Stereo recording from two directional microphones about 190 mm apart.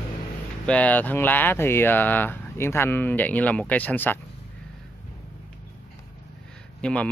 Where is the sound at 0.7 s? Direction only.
5° left (ahead or behind).